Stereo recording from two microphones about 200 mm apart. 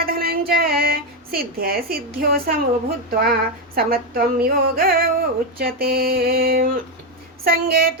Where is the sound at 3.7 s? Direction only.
50° right (ahead or behind).